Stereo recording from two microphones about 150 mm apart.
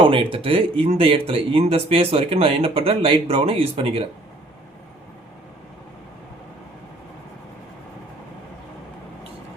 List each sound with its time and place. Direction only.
0.0 s speech: 35° right (ahead or behind)